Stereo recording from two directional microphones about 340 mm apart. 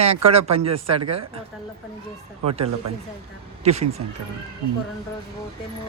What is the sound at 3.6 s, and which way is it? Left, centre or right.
Speech, centre.